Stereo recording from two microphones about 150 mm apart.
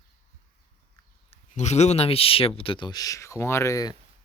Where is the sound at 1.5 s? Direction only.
50° left (ahead or behind); by 3.9 s 20° left (ahead or behind).